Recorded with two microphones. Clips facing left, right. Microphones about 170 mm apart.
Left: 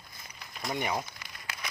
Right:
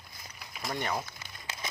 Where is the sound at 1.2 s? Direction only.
25° right (ahead or behind).